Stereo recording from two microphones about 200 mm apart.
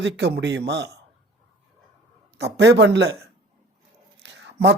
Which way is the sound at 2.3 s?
60° right (ahead or behind).